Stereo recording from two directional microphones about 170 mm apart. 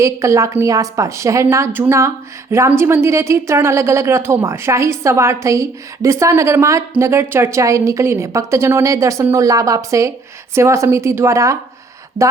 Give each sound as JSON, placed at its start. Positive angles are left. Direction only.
{"t": 0.0, "sound": "a woman's voice", "side_deg": -15}